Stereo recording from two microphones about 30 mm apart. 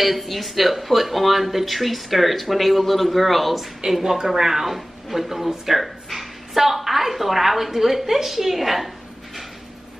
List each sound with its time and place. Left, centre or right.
0.0 s speech: centre
4.0 s speech: centre